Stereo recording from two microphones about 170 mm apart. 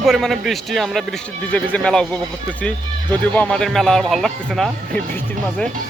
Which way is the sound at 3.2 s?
5° left (ahead or behind).